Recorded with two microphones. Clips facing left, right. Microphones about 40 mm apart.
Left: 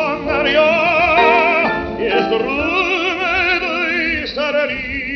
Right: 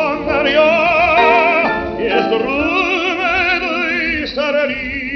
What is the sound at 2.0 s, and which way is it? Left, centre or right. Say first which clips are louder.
Music: right 1 dB; centre.